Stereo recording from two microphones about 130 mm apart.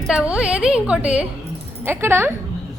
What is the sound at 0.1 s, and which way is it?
Speech, 5° right (ahead or behind).